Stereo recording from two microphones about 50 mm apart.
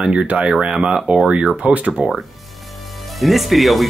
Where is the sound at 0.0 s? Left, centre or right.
Right.